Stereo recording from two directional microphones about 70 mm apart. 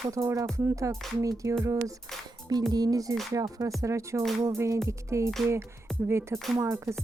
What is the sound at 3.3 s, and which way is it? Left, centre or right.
Speech, right.